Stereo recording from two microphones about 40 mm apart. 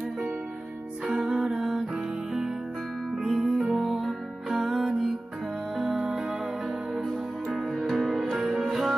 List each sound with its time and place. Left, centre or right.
1.2 s music: centre
5.9 s music: right
7.9 s music: centre